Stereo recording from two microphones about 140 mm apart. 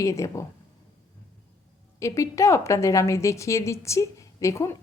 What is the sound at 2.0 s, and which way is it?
A woman's voice, 20° left (ahead or behind).